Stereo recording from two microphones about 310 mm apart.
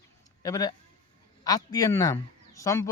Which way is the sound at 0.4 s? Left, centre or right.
Centre.